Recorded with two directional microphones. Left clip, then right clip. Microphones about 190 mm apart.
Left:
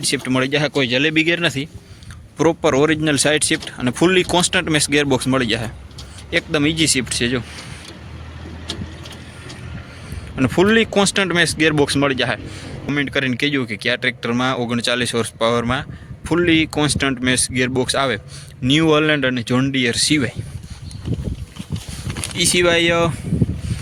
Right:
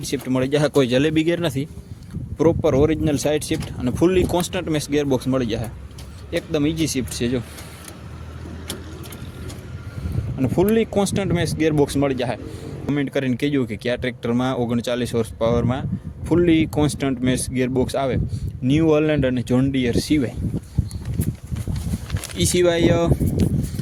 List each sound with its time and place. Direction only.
0.0 s speech: centre (ahead or behind)
0.7 s speech: 40° right (ahead or behind); by 1.7 s 15° right (ahead or behind)
2.4 s speech: centre (ahead or behind)
10.3 s speech: 5° left (ahead or behind)
22.4 s speech: 15° right (ahead or behind)